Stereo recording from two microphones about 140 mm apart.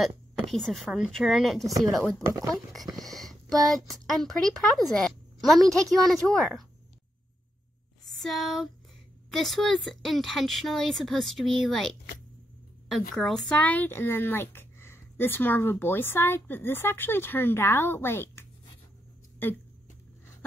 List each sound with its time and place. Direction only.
0.5 s a woman's voice: centre (ahead or behind)
1.7 s speech: 25° right (ahead or behind)
2.0 s a woman's voice: centre (ahead or behind)
3.0 s a sound: centre (ahead or behind)
3.7 s a woman's voice: centre (ahead or behind)
8.0 s a woman's voice: centre (ahead or behind)
13.1 s speech: 5° left (ahead or behind)